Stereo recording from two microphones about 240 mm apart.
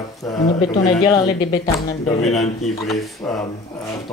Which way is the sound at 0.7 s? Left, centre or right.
Centre.